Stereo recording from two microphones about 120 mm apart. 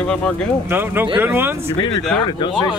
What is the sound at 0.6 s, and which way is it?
Speech, 15° right (ahead or behind).